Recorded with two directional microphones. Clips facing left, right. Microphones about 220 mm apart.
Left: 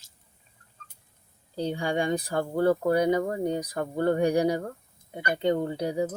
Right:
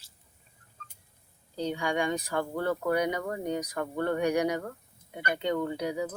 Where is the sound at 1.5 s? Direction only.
35° left (ahead or behind).